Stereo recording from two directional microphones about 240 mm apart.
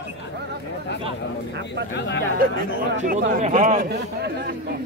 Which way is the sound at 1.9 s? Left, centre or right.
Left.